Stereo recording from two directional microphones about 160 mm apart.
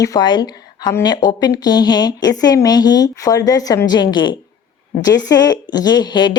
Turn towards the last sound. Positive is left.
turn(degrees=25)  # may be behind; listen again after turning